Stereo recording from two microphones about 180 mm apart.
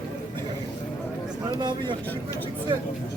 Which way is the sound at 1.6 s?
25° right (ahead or behind).